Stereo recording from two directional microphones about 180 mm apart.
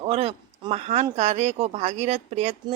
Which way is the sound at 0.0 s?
35° right (ahead or behind).